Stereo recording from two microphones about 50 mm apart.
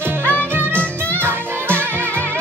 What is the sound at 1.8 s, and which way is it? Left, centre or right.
Music, right.